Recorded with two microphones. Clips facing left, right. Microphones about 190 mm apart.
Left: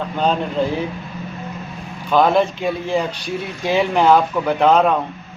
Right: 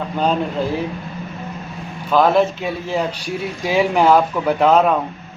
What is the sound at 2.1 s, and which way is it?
A man's voice, centre (ahead or behind).